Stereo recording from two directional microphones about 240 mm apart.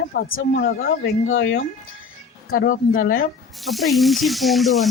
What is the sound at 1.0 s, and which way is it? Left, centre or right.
Speech, left.